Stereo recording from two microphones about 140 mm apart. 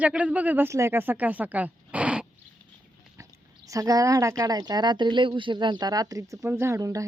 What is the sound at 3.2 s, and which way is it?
Speech, 25° right (ahead or behind).